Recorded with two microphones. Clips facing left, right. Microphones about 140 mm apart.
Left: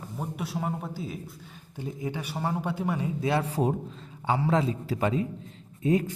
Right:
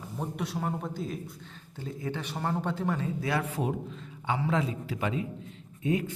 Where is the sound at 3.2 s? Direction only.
30° left (ahead or behind).